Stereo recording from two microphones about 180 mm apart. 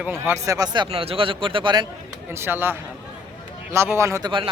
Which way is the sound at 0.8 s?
30° right (ahead or behind).